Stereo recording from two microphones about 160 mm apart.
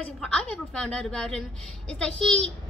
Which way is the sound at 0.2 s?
5° left (ahead or behind).